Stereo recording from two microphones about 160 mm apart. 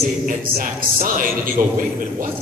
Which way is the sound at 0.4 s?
60° right (ahead or behind).